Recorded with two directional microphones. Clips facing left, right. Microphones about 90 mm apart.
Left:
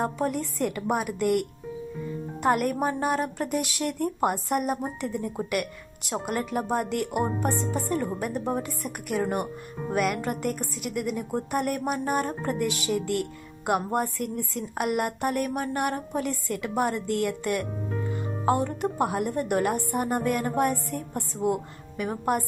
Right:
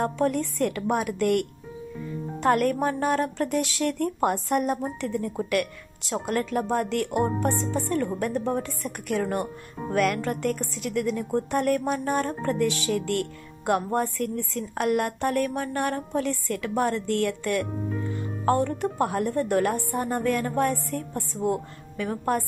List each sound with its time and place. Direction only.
0.0 s a woman's voice: 5° left (ahead or behind)